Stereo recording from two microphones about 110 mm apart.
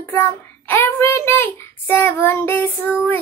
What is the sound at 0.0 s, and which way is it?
A child's voice, 20° left (ahead or behind).